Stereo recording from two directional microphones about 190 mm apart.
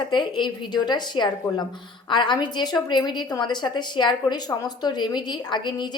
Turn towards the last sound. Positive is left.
turn(degrees=25)  # may be behind; listen again after turning